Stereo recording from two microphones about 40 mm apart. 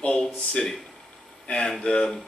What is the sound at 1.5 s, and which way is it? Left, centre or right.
Speech, centre.